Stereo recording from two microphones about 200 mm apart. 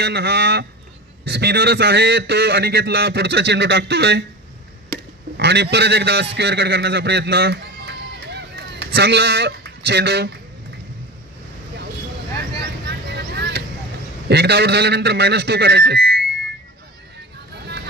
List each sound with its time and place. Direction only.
0.0 s a man's voice: 55° right (ahead or behind)
5.4 s a man's voice: 55° right (ahead or behind)
12.8 s vehicle: 55° right (ahead or behind)
14.3 s a man's voice: 55° right (ahead or behind)